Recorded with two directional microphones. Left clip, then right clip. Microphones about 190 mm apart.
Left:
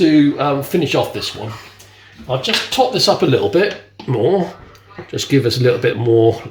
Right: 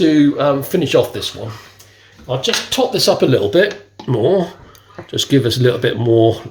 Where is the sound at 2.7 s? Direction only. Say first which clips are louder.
Left 1 dB; 45° right (ahead or behind).